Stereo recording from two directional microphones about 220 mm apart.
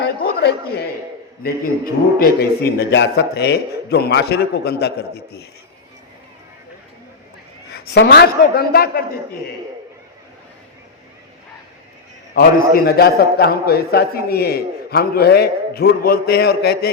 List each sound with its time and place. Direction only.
0.0 s a sound: 45° left (ahead or behind)
1.6 s a man's voice: 40° left (ahead or behind)
7.7 s a man's voice: 45° left (ahead or behind)
12.3 s a man's voice: 40° left (ahead or behind)